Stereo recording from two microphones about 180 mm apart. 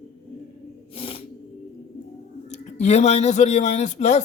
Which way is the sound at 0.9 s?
30° left (ahead or behind).